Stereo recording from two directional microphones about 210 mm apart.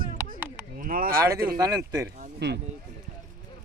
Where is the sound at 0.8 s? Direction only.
40° right (ahead or behind).